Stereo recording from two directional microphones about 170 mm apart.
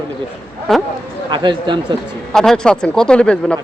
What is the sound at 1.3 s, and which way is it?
Speech, 25° right (ahead or behind).